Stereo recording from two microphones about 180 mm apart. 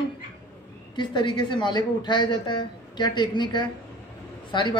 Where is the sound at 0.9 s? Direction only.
25° left (ahead or behind).